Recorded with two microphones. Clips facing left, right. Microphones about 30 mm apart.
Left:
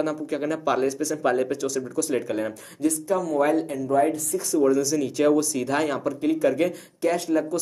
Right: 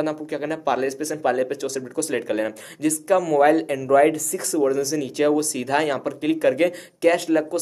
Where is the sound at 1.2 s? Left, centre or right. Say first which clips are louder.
Right 2 dB; centre.